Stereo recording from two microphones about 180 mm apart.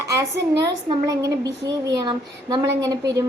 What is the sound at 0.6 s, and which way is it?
A woman's voice, 20° right (ahead or behind).